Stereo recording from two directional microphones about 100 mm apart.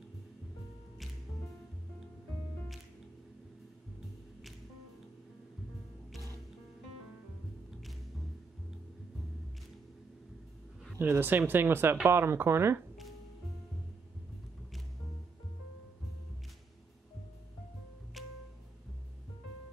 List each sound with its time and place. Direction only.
11.0 s speech: 20° right (ahead or behind)
18.2 s music: centre (ahead or behind)